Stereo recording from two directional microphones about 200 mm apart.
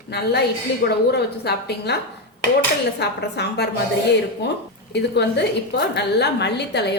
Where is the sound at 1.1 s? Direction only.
55° left (ahead or behind).